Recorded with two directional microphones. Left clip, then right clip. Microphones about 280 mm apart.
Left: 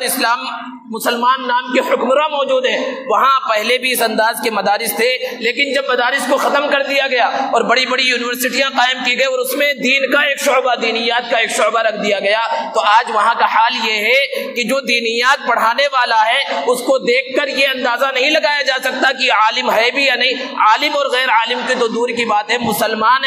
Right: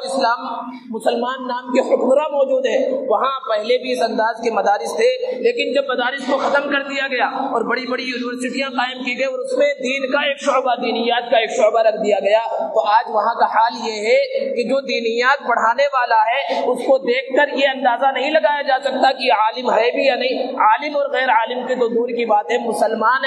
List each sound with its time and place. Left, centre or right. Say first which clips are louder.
1.0 s speech: left 5 dB; left